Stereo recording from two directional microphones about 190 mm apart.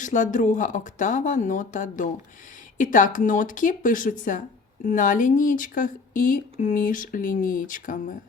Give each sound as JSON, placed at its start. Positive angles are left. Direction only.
{"t": 0.0, "sound": "speech", "side_deg": 40}